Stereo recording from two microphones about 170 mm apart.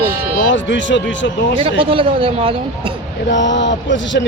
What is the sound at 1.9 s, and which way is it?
Speech, 30° right (ahead or behind).